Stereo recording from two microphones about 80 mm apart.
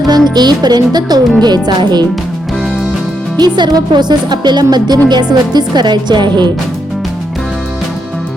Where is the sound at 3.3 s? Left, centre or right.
Right.